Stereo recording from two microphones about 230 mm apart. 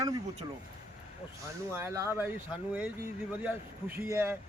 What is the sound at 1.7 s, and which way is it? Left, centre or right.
A man's voice, centre.